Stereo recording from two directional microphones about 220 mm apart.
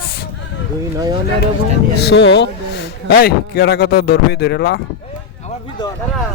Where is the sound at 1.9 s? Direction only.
50° left (ahead or behind).